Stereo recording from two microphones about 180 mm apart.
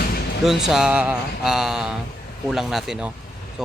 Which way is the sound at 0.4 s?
Centre (ahead or behind).